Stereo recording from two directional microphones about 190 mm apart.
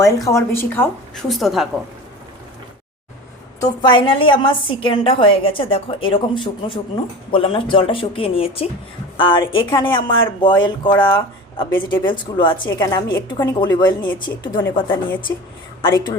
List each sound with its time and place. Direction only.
0.0 s speech: 15° left (ahead or behind)
1.3 s a woman's voice: centre (ahead or behind)
3.6 s a woman's voice: 25° left (ahead or behind)
15.3 s a woman's voice: 15° left (ahead or behind)